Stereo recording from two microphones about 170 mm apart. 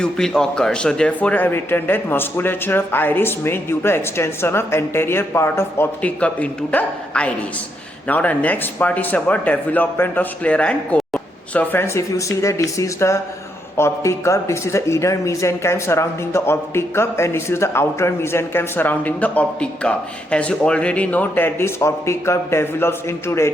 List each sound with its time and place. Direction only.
0.0 s a man's voice: 5° left (ahead or behind)